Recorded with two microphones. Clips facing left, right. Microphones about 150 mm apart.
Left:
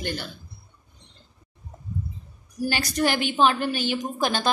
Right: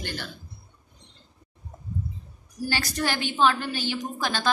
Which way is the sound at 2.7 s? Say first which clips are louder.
Left 4 dB; 15° left (ahead or behind).